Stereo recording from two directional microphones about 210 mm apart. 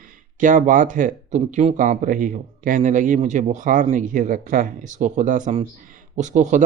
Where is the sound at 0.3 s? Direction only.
40° right (ahead or behind).